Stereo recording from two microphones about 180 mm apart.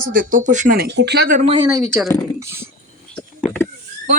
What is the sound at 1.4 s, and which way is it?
Speech, 30° right (ahead or behind).